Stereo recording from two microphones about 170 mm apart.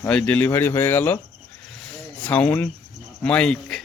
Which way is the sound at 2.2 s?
10° left (ahead or behind).